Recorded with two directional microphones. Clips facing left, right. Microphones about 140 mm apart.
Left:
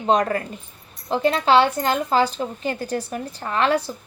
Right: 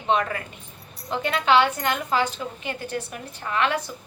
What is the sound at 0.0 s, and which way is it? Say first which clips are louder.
A woman's voice: left 4 dB; 40° left (ahead or behind).